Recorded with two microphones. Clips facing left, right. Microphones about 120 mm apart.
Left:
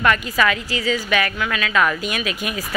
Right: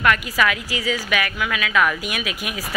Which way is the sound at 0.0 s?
5° right (ahead or behind).